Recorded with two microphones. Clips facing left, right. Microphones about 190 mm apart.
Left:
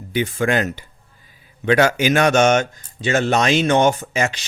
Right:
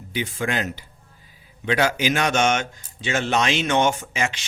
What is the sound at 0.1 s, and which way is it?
Speech, 55° left (ahead or behind).